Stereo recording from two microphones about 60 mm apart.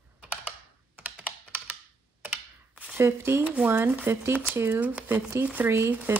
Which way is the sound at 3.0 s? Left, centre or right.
Right.